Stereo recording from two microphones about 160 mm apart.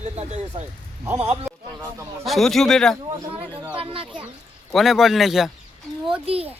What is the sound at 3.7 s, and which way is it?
Speech, 35° right (ahead or behind).